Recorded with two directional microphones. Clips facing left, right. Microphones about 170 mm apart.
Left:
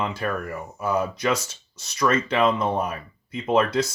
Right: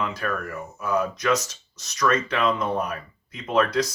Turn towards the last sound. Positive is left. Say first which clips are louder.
# left 1 dB
turn(degrees=25)  # may be behind; listen again after turning